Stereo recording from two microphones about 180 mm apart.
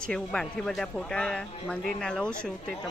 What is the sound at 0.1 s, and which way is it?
Speech, 5° left (ahead or behind).